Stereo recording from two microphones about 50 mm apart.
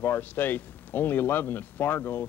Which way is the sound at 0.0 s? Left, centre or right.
Left.